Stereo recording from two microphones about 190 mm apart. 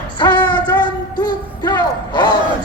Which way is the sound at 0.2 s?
25° left (ahead or behind).